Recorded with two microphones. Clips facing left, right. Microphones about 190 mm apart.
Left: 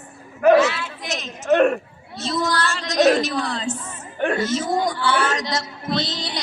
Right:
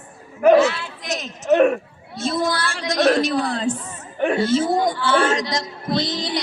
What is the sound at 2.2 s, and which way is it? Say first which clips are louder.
Speech: right 2 dB; 50° right (ahead or behind).